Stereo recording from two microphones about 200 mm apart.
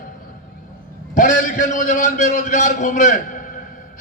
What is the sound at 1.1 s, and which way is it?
A man's voice, 40° left (ahead or behind).